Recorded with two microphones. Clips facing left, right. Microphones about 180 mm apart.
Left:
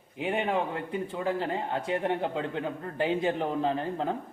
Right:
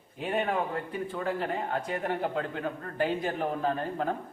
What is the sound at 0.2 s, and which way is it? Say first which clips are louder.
Speech: left 1 dB; 20° left (ahead or behind).